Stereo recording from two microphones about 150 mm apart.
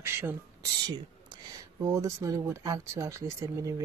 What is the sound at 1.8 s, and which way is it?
Speech, 20° right (ahead or behind).